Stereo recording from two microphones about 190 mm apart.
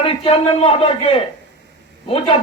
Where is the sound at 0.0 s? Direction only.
30° left (ahead or behind).